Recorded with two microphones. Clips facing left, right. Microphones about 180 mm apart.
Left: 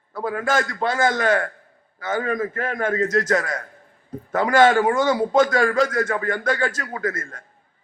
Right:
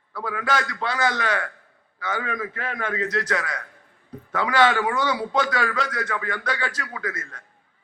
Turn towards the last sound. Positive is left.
turn(degrees=45)  # may be behind; listen again after turning